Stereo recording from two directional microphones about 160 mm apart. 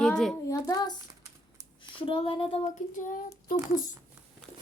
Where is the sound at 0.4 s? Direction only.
20° left (ahead or behind).